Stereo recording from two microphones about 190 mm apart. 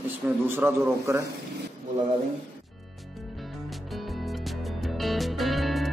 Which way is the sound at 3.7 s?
Centre (ahead or behind).